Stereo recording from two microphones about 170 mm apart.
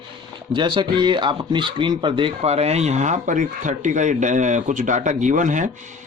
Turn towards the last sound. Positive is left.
turn(degrees=-45)  # may be behind; listen again after turning